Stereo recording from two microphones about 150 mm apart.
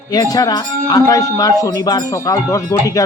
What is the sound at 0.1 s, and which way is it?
Speech, 25° left (ahead or behind).